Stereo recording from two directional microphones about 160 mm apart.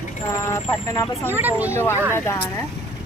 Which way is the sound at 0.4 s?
20° left (ahead or behind).